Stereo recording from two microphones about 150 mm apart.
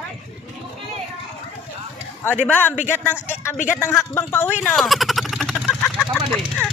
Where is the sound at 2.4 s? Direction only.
10° left (ahead or behind).